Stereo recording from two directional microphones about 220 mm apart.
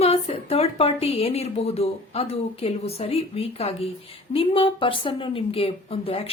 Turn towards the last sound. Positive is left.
turn(degrees=25)  # may be behind; listen again after turning